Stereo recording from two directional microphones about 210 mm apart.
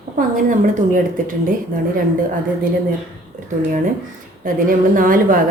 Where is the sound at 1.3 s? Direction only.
40° right (ahead or behind).